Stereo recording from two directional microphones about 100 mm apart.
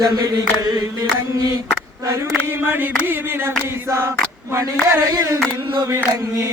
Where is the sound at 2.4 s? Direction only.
20° right (ahead or behind).